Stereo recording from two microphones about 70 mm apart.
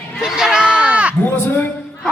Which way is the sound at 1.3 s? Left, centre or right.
Left.